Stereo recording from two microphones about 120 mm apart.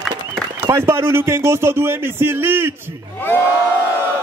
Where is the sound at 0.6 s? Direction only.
20° right (ahead or behind).